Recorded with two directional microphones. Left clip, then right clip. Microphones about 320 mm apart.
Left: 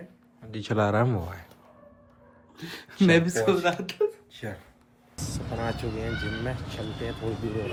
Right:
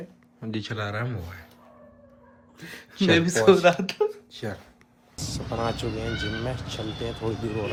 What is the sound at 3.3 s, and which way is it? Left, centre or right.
Speech, right.